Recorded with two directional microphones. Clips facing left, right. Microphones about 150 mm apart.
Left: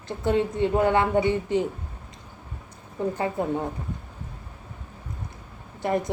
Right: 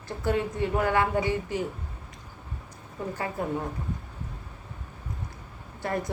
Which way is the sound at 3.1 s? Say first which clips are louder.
Left 2 dB; 25° left (ahead or behind).